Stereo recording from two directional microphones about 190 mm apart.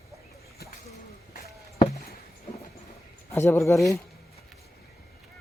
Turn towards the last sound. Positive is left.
turn(degrees=15)  # may be behind; listen again after turning